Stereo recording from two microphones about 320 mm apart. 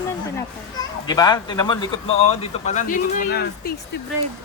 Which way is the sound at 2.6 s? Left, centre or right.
Left.